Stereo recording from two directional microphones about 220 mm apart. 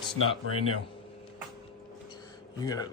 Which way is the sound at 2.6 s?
15° left (ahead or behind).